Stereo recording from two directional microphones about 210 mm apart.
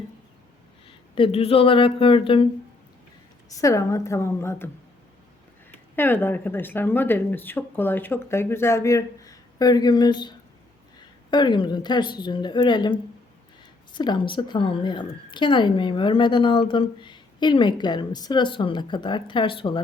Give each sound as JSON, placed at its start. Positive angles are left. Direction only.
{"t": 0.9, "sound": "speech", "side_deg": 25}
{"t": 3.6, "sound": "speech", "side_deg": 15}
{"t": 6.0, "sound": "a woman's voice", "side_deg": 10}